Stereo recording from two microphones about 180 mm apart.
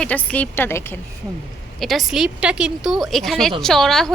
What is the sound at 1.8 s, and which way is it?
Speech, centre (ahead or behind).